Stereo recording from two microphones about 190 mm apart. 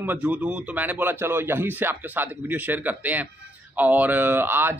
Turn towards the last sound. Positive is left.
turn(degrees=-10)  # may be behind; listen again after turning